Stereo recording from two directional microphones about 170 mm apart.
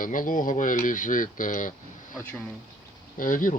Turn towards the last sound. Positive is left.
turn(degrees=50)  # may be behind; listen again after turning